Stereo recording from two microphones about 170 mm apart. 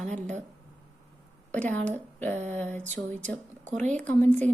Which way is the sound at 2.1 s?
10° left (ahead or behind).